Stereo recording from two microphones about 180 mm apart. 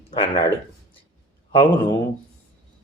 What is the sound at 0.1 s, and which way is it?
Speech, 30° left (ahead or behind).